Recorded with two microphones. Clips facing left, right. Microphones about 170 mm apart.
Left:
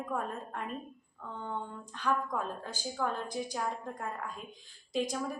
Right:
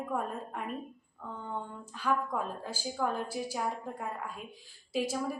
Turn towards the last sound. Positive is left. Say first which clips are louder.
# right 1 dB
turn(degrees=-5)  # may be behind; listen again after turning